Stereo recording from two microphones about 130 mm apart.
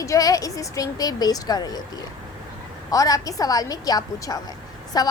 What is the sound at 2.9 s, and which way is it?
A woman's voice, 30° left (ahead or behind).